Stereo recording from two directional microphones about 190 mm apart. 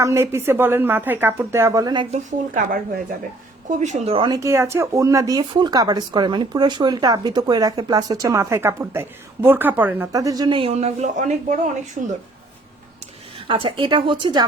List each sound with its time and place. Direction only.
0.0 s speech: 15° right (ahead or behind); by 12.1 s 45° right (ahead or behind)
13.5 s speech: 25° right (ahead or behind)